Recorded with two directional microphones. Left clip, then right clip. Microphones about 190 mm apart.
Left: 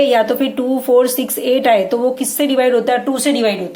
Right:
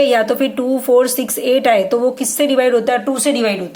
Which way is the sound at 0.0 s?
15° right (ahead or behind).